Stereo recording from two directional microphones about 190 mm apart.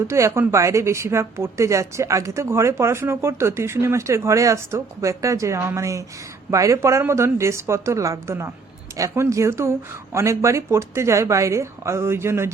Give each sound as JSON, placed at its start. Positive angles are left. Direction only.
{"t": 0.1, "sound": "a woman's voice", "side_deg": -15}